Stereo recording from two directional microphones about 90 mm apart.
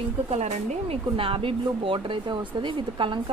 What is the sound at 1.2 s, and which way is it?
Speech, 80° right.